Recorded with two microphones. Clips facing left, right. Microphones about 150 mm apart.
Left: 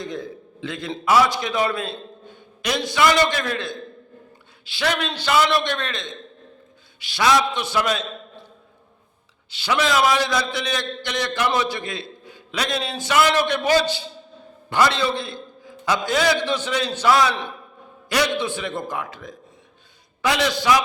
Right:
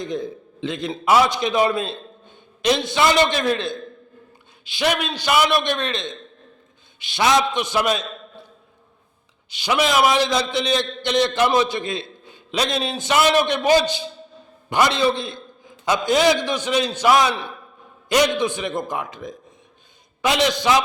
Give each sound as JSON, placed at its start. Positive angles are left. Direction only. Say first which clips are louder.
{"t": 0.0, "sound": "a man's voice", "louder": "right 4 dB", "side_deg": -20}
{"t": 9.5, "sound": "a man's voice", "louder": "right 1 dB", "side_deg": -15}